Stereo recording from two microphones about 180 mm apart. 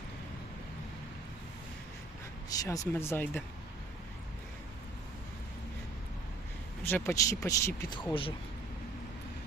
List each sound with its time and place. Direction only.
2.5 s speech: 20° left (ahead or behind)
6.8 s speech: 15° left (ahead or behind)